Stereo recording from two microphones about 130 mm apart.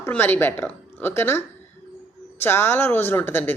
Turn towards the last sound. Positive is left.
turn(degrees=15)  # may be behind; listen again after turning